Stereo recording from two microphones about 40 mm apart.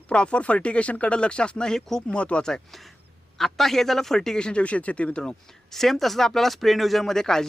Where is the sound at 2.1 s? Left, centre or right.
Left.